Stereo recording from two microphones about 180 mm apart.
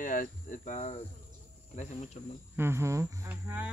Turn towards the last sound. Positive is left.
turn(degrees=-10)  # may be behind; listen again after turning